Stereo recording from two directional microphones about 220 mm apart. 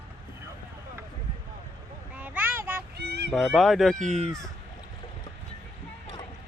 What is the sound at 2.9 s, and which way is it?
Honk, 50° right (ahead or behind).